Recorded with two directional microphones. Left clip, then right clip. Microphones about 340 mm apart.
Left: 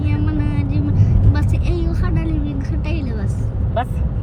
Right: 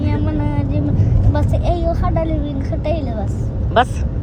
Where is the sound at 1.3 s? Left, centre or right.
Centre.